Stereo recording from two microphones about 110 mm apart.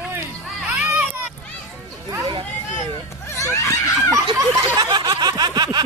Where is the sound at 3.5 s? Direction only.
25° left (ahead or behind).